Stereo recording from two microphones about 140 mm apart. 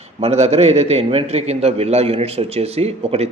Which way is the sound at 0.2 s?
50° right (ahead or behind).